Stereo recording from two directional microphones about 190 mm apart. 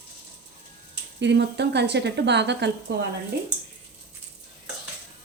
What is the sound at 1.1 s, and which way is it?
A woman's voice, 65° right (ahead or behind).